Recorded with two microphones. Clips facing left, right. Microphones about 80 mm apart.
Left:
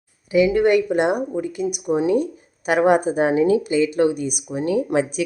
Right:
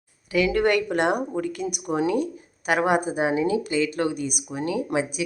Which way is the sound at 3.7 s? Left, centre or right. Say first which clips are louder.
Left 6 dB; left.